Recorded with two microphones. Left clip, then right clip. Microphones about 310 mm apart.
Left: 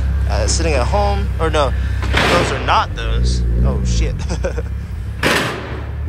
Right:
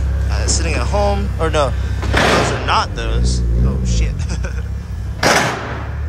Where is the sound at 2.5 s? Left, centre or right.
Centre.